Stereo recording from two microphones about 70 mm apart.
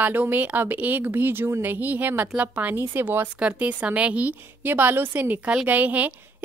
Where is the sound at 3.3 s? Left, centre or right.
Centre.